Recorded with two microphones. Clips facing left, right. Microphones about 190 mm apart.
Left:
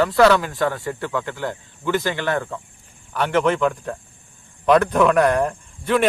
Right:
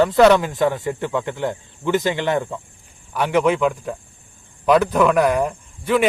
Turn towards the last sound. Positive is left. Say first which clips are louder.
# right 1 dB
turn(degrees=-5)  # may be behind; listen again after turning